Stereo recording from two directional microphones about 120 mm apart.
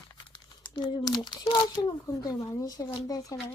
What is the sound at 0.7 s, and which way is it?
Speech, 35° left (ahead or behind).